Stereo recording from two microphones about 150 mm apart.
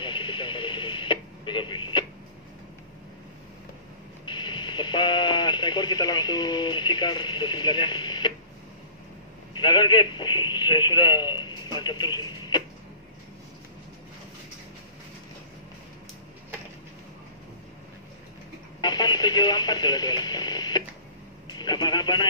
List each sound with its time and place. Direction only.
0.0 s radio: 35° left (ahead or behind)
4.3 s radio: 30° left (ahead or behind)
9.6 s a man's voice: 30° left (ahead or behind)
18.8 s radio: 30° left (ahead or behind)
21.5 s vehicle: 30° left (ahead or behind)